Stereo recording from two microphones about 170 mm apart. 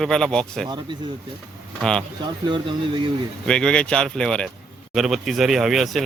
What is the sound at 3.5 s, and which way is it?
Speech, 5° left (ahead or behind).